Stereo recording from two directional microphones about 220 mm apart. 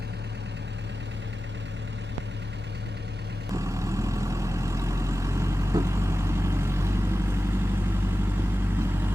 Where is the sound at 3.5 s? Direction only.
15° right (ahead or behind).